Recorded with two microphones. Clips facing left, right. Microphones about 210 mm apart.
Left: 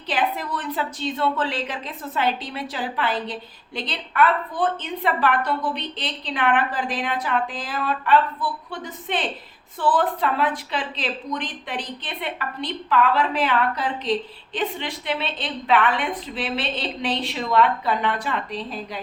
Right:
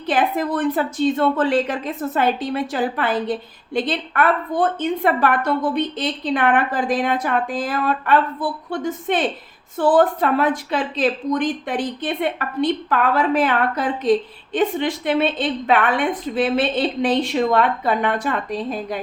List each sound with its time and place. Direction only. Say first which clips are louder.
0.1 s speech: right 6 dB; 50° right (ahead or behind)